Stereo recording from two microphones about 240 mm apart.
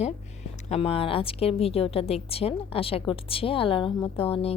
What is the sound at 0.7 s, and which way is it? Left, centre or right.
A woman's voice, left.